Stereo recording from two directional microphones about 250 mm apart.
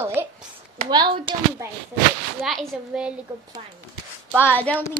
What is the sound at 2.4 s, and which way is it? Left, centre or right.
Speech, centre.